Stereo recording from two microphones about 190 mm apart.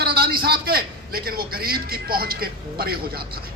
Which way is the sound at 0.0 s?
55° right (ahead or behind).